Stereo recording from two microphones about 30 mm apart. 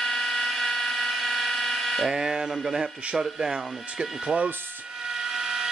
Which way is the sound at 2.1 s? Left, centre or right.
Right.